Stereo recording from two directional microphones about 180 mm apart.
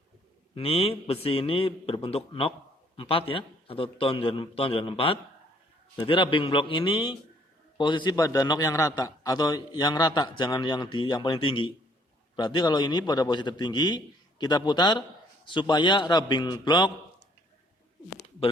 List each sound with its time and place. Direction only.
0.5 s a man's voice: 30° left (ahead or behind)